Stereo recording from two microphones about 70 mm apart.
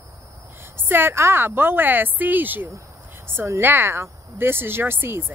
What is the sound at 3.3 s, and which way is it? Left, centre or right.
Speech, right.